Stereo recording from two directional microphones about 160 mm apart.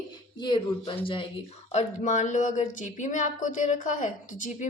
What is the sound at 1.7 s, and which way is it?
Speech, 50° left (ahead or behind).